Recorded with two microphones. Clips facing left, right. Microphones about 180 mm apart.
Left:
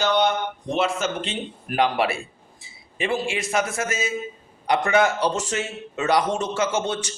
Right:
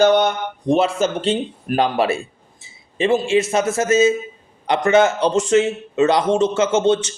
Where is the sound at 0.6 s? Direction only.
35° right (ahead or behind).